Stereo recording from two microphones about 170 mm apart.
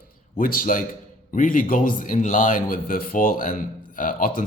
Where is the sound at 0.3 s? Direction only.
55° left (ahead or behind).